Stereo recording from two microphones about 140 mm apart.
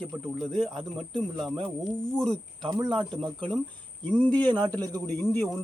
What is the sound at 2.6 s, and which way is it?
Speech, 30° right (ahead or behind).